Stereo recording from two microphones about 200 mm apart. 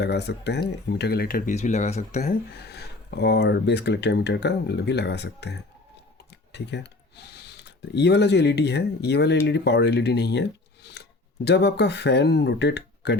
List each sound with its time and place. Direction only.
0.0 s speech: 55° left (ahead or behind); by 2.4 s 35° left (ahead or behind)
2.6 s speech: 55° left (ahead or behind)